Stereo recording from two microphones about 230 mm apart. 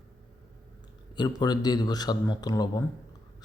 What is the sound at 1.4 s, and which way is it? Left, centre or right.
Speech, centre.